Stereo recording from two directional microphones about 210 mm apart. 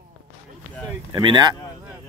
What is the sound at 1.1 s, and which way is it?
Speech, 20° right (ahead or behind).